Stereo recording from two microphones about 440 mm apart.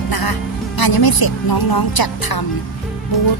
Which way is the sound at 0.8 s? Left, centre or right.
Left.